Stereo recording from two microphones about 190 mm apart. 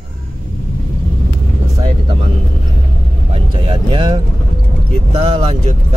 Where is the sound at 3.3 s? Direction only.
30° right (ahead or behind).